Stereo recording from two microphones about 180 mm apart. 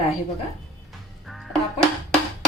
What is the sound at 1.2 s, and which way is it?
Music, centre (ahead or behind).